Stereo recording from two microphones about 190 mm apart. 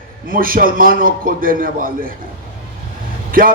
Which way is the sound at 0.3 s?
50° right (ahead or behind).